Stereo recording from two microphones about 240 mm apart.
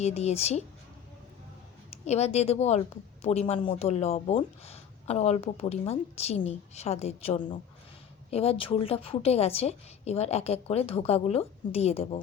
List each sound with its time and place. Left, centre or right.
0.0 s a woman's voice: left
1.9 s a woman's voice: left